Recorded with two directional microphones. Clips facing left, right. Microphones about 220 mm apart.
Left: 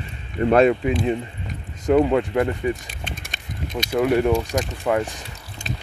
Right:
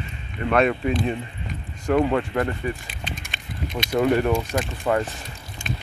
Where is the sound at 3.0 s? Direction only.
55° left (ahead or behind).